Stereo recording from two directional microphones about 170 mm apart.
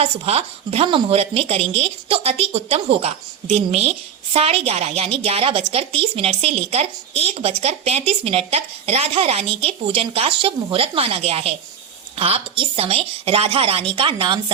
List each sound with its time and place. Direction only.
0.0 s speech: 35° right (ahead or behind)